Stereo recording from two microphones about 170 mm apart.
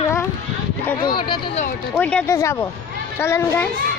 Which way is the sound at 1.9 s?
5° left (ahead or behind).